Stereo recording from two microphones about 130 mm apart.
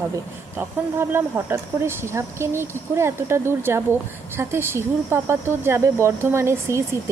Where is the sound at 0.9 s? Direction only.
20° right (ahead or behind).